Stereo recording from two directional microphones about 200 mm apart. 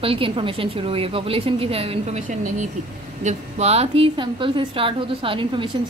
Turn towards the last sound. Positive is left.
turn(degrees=-25)  # may be behind; listen again after turning